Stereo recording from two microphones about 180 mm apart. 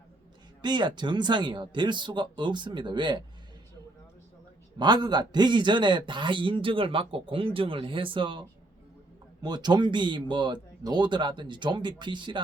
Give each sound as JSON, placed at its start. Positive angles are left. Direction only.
{"t": 0.6, "sound": "a man's voice", "side_deg": -25}
{"t": 4.8, "sound": "a man's voice", "side_deg": -25}